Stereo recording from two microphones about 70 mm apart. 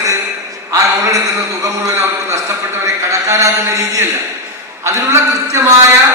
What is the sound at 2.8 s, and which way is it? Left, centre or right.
A man's voice, right.